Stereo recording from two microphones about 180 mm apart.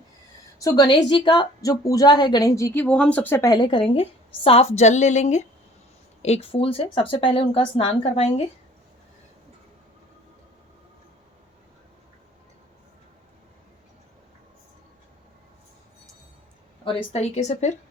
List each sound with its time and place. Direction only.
0.6 s a woman's voice: 20° left (ahead or behind)
16.8 s a woman's voice: 35° left (ahead or behind)